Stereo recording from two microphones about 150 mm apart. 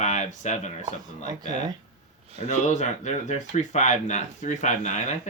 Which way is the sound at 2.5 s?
50° left (ahead or behind).